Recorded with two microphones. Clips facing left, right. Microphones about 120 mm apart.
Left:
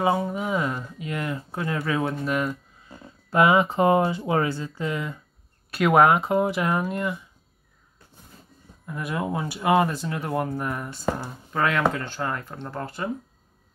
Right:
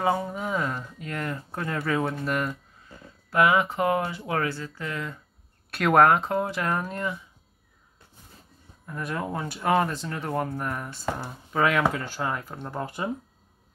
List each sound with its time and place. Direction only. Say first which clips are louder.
0.0 s speech: left 2 dB; 5° left (ahead or behind)
3.3 s speech: left 3 dB; 25° left (ahead or behind); by 7.2 s 5° left (ahead or behind)
8.8 s speech: left 3 dB; 5° left (ahead or behind); by 13.1 s 15° right (ahead or behind)